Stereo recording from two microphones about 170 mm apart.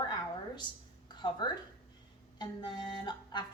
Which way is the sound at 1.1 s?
25° left (ahead or behind).